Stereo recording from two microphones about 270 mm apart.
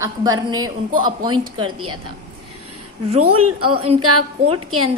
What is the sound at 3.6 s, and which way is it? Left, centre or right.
Speech, centre.